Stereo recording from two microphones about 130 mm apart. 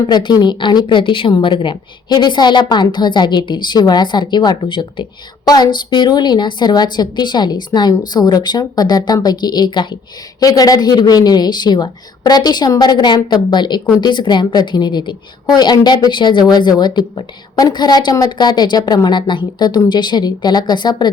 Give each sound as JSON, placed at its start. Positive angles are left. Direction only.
{"t": 0.1, "sound": "a woman's voice", "side_deg": 35}